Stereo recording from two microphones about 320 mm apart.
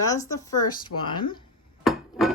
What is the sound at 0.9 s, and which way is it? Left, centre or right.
Speech, left.